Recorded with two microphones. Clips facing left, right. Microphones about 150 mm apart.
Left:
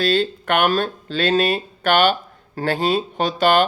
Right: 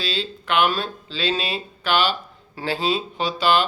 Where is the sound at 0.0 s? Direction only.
50° left (ahead or behind).